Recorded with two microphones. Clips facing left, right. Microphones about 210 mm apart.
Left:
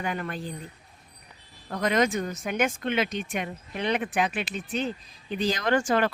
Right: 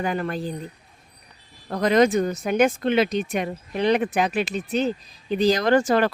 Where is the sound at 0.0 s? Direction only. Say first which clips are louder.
Right 6 dB; 35° right (ahead or behind).